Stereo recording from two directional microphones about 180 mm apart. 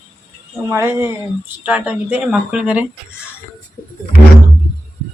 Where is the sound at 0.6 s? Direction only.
15° right (ahead or behind).